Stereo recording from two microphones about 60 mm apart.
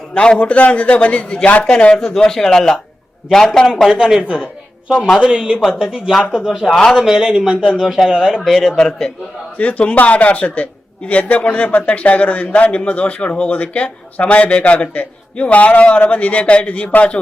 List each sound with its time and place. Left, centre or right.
0.1 s a man's voice: centre
3.8 s a man's voice: centre
9.6 s a man's voice: left